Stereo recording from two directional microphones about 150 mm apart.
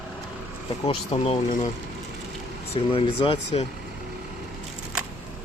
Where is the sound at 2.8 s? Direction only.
35° left (ahead or behind).